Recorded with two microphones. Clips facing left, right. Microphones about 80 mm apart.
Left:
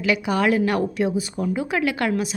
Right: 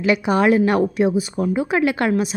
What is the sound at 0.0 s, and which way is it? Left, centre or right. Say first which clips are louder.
A woman's voice: right 4 dB; right.